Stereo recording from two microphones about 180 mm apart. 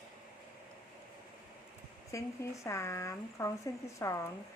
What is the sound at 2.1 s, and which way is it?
Speech, 15° left (ahead or behind).